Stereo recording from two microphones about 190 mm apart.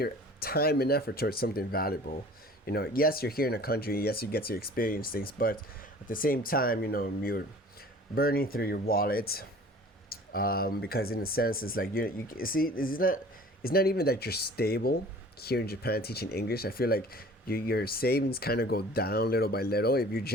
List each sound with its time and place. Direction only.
0.0 s speech: 55° left (ahead or behind)